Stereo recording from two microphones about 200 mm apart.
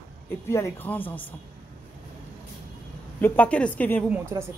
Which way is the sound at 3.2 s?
10° left (ahead or behind).